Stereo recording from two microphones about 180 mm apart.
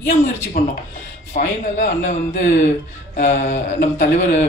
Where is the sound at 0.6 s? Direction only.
45° left (ahead or behind).